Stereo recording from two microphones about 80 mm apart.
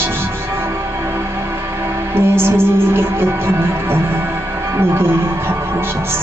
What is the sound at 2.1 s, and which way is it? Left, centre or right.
Music, right.